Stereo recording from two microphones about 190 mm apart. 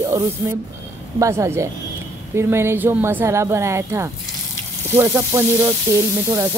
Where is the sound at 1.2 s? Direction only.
15° right (ahead or behind).